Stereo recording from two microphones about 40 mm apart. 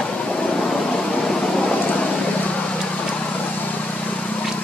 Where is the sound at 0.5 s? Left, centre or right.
Left.